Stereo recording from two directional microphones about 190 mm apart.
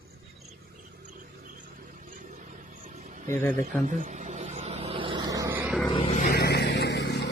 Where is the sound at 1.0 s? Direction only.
45° right (ahead or behind).